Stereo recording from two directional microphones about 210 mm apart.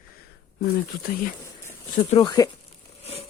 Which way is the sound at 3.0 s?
30° left (ahead or behind).